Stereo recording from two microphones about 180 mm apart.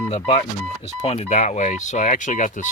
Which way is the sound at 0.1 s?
35° left (ahead or behind).